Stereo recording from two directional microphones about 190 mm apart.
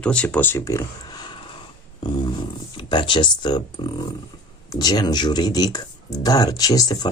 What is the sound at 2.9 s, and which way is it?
Speech, 25° left (ahead or behind).